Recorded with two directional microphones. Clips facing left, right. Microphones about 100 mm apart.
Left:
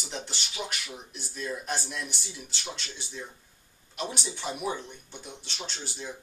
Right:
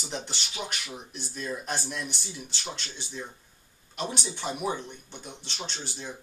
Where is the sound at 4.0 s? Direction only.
Centre (ahead or behind).